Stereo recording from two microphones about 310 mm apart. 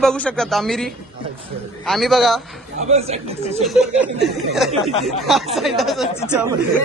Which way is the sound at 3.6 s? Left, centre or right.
Centre.